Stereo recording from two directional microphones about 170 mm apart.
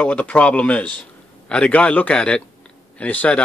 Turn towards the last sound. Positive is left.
turn(degrees=10)  # may be behind; listen again after turning